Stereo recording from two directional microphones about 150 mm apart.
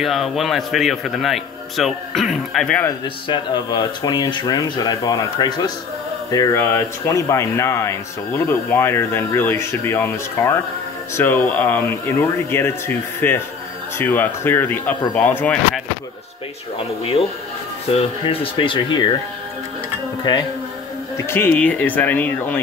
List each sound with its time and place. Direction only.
0.0 s a man's voice: centre (ahead or behind)
3.3 s speech: 30° left (ahead or behind); by 15.5 s 10° left (ahead or behind)
18.2 s speech: 40° left (ahead or behind)
20.3 s speech: 30° left (ahead or behind)
21.2 s speech: 15° left (ahead or behind)